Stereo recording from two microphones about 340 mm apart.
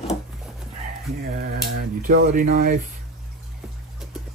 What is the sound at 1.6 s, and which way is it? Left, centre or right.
Speech, right.